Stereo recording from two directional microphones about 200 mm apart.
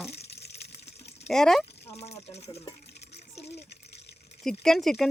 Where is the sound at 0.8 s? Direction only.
30° left (ahead or behind).